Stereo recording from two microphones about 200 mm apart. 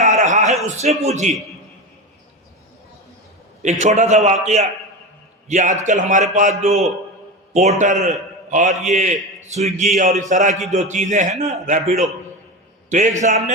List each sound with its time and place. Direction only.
0.0 s a sound: 35° right (ahead or behind)
0.6 s a man's voice: 30° right (ahead or behind)
3.8 s a man's voice: 35° right (ahead or behind)